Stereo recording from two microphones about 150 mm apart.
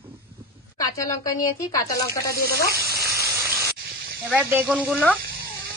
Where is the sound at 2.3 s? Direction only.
90° left.